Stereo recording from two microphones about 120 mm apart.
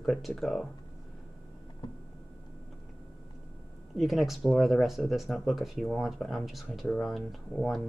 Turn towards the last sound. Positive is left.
turn(degrees=0)  # may be behind; listen again after turning